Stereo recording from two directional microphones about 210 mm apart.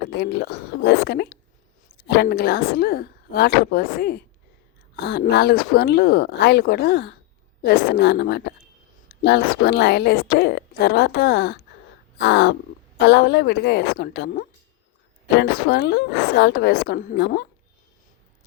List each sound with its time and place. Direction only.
0.1 s a woman's voice: 50° left (ahead or behind)
12.1 s crow: 55° left (ahead or behind)
13.0 s a woman's voice: 55° left (ahead or behind)